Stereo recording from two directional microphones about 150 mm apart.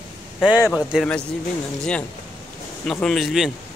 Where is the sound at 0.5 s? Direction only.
25° left (ahead or behind).